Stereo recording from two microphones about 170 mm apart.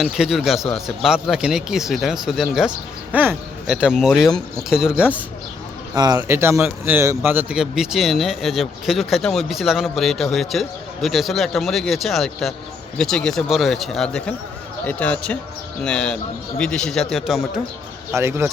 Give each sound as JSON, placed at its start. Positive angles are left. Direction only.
{"t": 0.0, "sound": "a man's voice", "side_deg": 0}
{"t": 5.9, "sound": "a man's voice", "side_deg": -25}
{"t": 18.1, "sound": "speech", "side_deg": -15}